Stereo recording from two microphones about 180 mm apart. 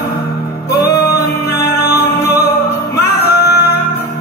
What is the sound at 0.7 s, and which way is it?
Music, 60° left (ahead or behind).